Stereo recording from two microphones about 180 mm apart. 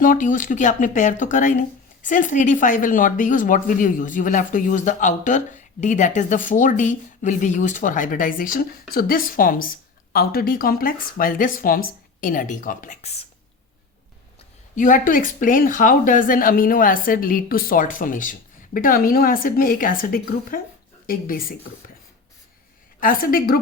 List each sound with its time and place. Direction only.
0.0 s speech: 45° left (ahead or behind)
14.8 s speech: 45° left (ahead or behind)
23.0 s speech: 50° left (ahead or behind)